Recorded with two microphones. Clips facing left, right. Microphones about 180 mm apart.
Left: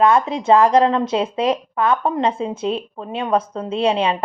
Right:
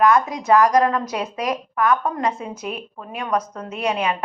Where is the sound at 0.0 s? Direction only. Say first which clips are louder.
Left 2 dB; 25° left (ahead or behind).